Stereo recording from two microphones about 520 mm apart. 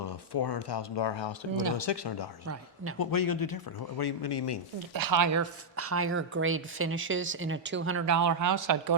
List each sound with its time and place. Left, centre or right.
0.0 s speech: left
4.9 s speech: right